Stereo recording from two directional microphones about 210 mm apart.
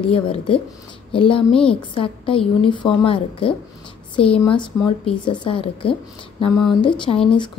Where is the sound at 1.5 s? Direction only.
5° left (ahead or behind).